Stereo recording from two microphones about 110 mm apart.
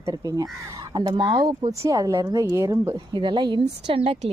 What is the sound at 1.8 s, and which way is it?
Speech, 30° right (ahead or behind).